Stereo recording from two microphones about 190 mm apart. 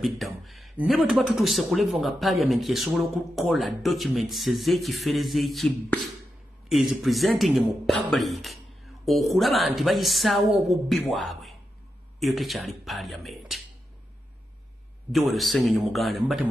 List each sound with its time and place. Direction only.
0.0 s speech: centre (ahead or behind)
15.1 s speech: centre (ahead or behind)